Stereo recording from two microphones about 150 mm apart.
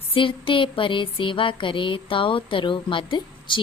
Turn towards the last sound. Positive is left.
turn(degrees=35)  # may be behind; listen again after turning